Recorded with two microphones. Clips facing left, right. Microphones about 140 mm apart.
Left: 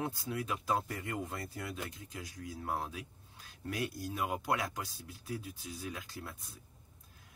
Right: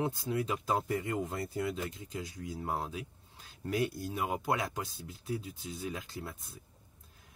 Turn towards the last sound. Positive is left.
turn(degrees=-25)  # may be behind; listen again after turning